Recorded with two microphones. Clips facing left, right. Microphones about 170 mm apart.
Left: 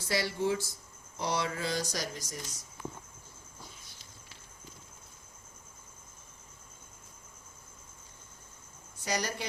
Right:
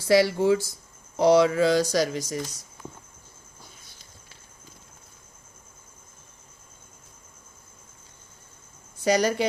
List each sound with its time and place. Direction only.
0.1 s speech: 90° right
9.0 s speech: 90° right